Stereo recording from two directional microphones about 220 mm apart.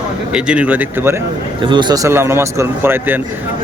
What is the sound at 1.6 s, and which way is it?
Speech, 20° right (ahead or behind).